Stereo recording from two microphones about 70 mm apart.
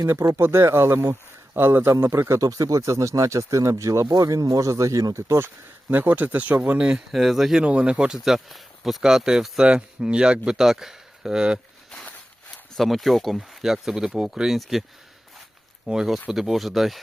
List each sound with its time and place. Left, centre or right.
0.1 s speech: right
2.4 s speech: right
5.9 s speech: right
7.1 s speech: centre
7.6 s speech: centre
12.7 s speech: centre
15.9 s speech: centre